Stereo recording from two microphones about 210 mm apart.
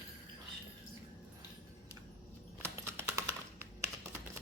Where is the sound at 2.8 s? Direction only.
10° right (ahead or behind).